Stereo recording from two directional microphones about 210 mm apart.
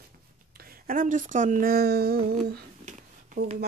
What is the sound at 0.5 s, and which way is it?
Speech, 45° right (ahead or behind).